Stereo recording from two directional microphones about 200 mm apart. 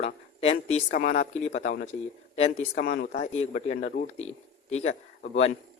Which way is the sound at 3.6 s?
45° left (ahead or behind).